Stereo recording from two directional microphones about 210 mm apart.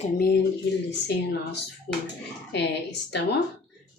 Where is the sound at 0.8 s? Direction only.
55° left (ahead or behind).